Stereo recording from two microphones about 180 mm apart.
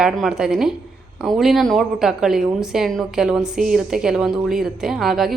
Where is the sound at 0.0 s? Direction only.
5° right (ahead or behind).